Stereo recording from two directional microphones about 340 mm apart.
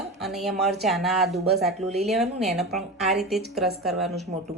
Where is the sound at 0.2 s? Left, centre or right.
Centre.